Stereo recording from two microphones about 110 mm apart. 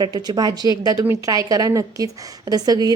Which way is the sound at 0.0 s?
40° right (ahead or behind).